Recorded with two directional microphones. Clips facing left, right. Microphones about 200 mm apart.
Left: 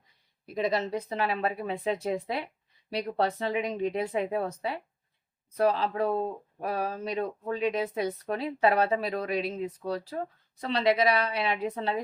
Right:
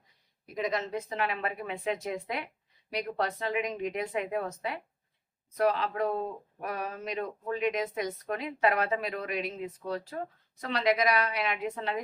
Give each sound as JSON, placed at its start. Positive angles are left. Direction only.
{"t": 0.4, "sound": "speech", "side_deg": 30}